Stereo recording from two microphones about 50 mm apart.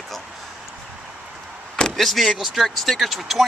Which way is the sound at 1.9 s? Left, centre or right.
Centre.